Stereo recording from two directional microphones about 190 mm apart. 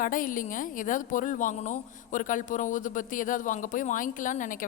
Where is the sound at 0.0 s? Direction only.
45° left (ahead or behind).